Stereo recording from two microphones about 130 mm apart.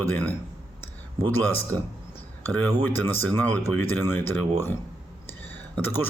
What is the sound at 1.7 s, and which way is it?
Speech, 40° right (ahead or behind).